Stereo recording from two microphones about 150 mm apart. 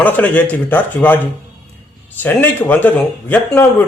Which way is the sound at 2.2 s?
10° left (ahead or behind).